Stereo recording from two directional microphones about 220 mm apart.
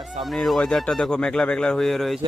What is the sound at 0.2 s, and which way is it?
Speech, centre (ahead or behind).